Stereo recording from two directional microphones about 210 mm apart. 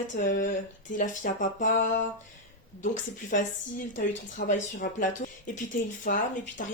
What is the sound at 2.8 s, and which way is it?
Speech, 35° left (ahead or behind).